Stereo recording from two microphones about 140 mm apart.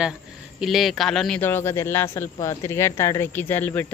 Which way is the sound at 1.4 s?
15° left (ahead or behind).